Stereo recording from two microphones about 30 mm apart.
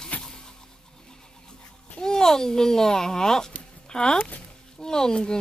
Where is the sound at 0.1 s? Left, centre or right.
Left.